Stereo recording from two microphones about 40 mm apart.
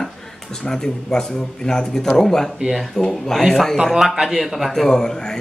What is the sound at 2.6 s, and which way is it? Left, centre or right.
Speech, centre.